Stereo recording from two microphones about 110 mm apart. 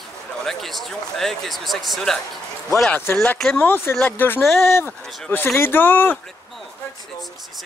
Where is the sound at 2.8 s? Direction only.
20° left (ahead or behind).